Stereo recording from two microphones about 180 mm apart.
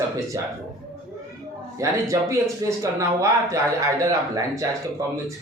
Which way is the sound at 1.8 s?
15° right (ahead or behind).